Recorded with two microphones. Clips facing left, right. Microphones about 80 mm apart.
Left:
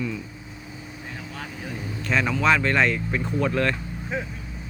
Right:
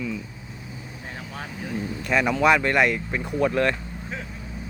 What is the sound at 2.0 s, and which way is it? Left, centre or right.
Speech, centre.